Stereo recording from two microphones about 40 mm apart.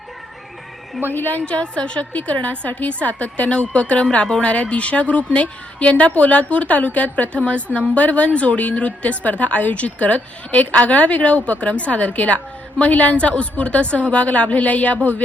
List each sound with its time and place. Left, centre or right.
1.1 s a woman's voice: left
1.4 s a woman's voice: left
2.1 s a woman's voice: left